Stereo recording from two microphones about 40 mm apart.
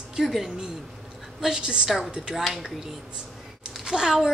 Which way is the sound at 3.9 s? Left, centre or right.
Centre.